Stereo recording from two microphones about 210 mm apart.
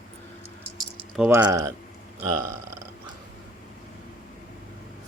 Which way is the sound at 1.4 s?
15° right (ahead or behind).